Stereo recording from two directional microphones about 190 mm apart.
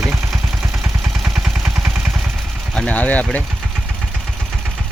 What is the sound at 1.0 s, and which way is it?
Vehicle, centre (ahead or behind).